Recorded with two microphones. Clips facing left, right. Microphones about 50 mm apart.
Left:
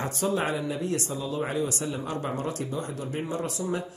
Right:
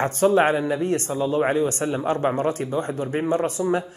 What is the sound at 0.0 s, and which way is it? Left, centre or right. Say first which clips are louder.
Speech: right 9 dB; right.